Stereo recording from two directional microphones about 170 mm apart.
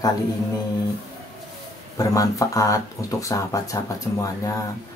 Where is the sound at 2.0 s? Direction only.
20° left (ahead or behind).